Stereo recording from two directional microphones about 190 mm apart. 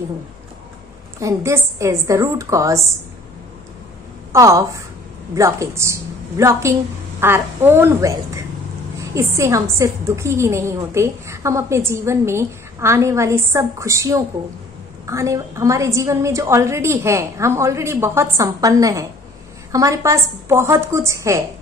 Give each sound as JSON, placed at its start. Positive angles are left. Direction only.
{"t": 1.2, "sound": "a woman's voice", "side_deg": -15}
{"t": 4.3, "sound": "a woman's voice", "side_deg": -15}